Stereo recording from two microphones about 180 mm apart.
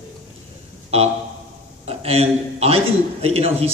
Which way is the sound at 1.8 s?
35° right (ahead or behind).